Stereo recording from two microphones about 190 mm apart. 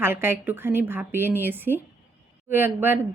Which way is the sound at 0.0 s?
10° right (ahead or behind).